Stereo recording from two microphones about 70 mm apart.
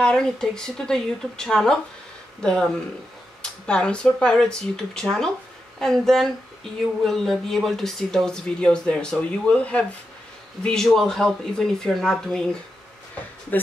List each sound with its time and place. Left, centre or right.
0.0 s speech: centre